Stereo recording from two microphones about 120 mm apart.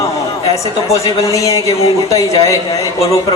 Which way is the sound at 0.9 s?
25° left (ahead or behind).